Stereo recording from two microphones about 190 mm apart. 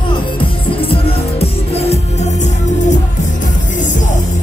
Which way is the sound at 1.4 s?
35° left (ahead or behind).